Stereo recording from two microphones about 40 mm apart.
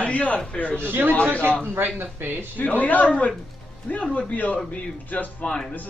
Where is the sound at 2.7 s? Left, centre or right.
Left.